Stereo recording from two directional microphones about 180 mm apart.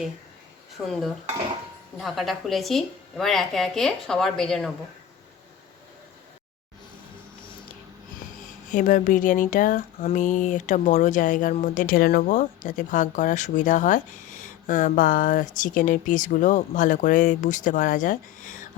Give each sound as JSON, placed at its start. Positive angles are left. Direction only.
{"t": 0.9, "sound": "a woman's voice", "side_deg": 0}
{"t": 8.7, "sound": "speech", "side_deg": 45}